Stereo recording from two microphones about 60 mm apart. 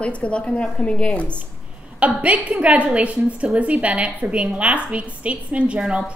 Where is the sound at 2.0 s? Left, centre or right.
Right.